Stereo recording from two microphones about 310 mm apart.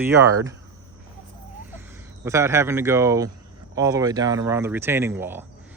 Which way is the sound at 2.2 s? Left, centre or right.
Centre.